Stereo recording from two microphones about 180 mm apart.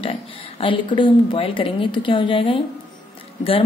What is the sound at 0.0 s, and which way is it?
A woman's voice, 30° left (ahead or behind).